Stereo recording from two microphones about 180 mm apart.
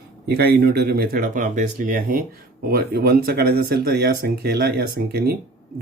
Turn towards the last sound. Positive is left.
turn(degrees=-60)  # may be behind; listen again after turning